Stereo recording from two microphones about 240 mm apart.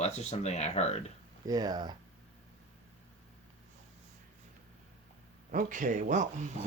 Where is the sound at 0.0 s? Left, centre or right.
Left.